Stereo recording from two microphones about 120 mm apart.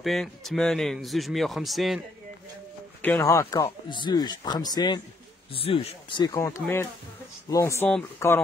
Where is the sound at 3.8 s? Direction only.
40° left (ahead or behind).